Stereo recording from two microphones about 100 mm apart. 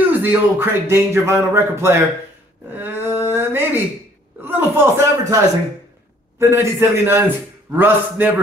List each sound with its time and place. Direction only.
0.2 s a man's voice: 20° right (ahead or behind)
2.7 s a sound: 20° right (ahead or behind)
4.4 s a man's voice: 20° right (ahead or behind)
6.4 s a man's voice: 25° right (ahead or behind)